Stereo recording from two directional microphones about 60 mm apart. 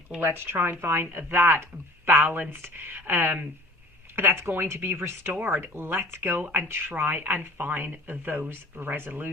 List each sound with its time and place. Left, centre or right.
0.2 s speech: right
5.3 s speech: right
6.4 s speech: right